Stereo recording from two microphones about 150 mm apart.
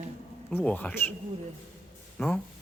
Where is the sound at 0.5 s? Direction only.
10° left (ahead or behind).